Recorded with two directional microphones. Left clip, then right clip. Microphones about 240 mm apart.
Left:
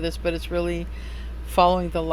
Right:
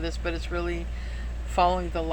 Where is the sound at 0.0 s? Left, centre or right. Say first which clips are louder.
Left 6 dB; left.